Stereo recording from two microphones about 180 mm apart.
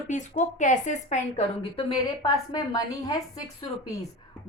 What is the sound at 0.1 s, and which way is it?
A woman's voice, 40° left (ahead or behind).